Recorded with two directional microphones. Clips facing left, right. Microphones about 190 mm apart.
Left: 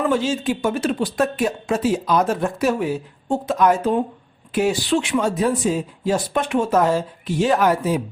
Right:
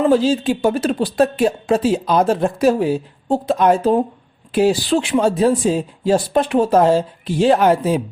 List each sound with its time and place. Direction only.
0.1 s speech: 35° right (ahead or behind)